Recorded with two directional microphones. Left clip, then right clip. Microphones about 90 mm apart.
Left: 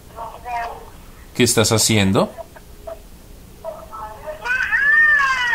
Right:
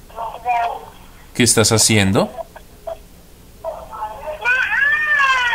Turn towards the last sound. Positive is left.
turn(degrees=-25)  # may be behind; listen again after turning